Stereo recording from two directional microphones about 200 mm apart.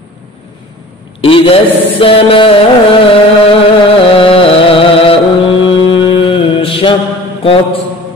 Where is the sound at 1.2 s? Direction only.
25° left (ahead or behind).